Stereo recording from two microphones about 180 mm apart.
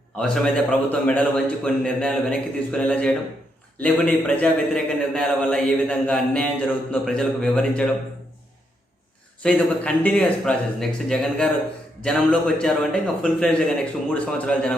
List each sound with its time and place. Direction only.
0.2 s a man's voice: 5° left (ahead or behind)
9.4 s a man's voice: 5° left (ahead or behind)